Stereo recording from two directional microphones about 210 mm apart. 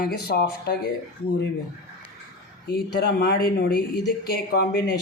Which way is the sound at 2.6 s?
50° left (ahead or behind).